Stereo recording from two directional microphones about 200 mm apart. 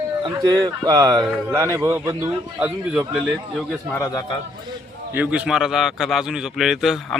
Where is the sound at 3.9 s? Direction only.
15° left (ahead or behind).